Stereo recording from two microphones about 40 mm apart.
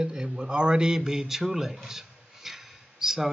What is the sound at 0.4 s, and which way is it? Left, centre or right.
A man's voice, right.